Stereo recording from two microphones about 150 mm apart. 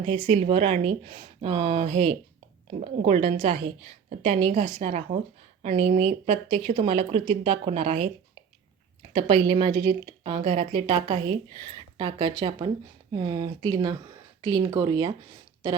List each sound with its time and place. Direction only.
0.3 s a woman's voice: 45° right (ahead or behind)